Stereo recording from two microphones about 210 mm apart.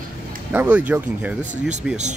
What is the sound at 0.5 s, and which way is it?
Speech, 10° right (ahead or behind).